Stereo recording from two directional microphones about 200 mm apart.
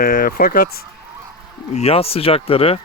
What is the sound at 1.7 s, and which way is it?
Speech, 30° left (ahead or behind).